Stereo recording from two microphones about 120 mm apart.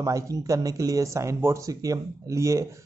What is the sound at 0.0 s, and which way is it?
Speech, 25° right (ahead or behind).